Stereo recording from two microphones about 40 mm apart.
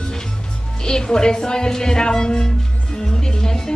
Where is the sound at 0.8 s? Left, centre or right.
Centre.